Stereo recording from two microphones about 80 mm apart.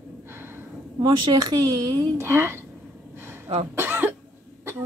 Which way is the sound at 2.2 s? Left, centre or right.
Right.